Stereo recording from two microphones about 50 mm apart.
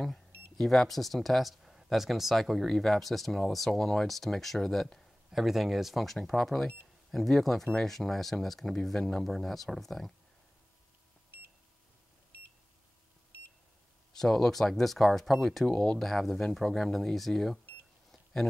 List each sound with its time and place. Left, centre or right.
0.6 s speech: centre
5.3 s speech: centre
14.1 s speech: centre
18.1 s a sound: centre